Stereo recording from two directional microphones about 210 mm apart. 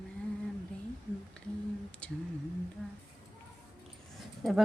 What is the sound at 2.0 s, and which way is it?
Speech, 5° left (ahead or behind).